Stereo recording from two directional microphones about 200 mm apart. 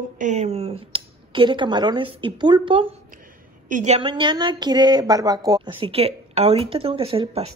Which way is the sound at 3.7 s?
35° right (ahead or behind).